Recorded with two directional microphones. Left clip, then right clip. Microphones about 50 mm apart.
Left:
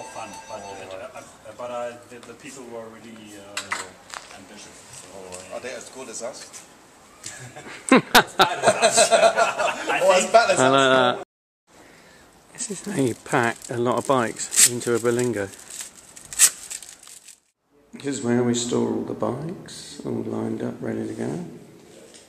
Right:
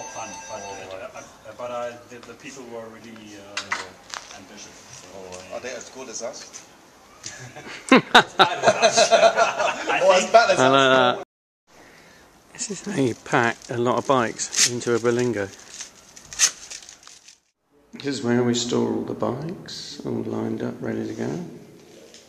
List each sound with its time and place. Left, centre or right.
0.0 s music: right
0.8 s a sound: centre
2.2 s speech: centre
8.5 s speech: centre
12.5 s speech: centre
14.9 s speech: centre
15.4 s a sound: centre
17.9 s speech: centre